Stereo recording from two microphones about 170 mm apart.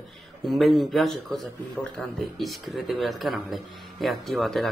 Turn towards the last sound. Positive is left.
turn(degrees=0)  # may be behind; listen again after turning